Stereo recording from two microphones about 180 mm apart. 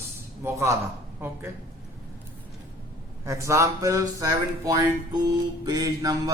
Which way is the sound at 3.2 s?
15° right (ahead or behind).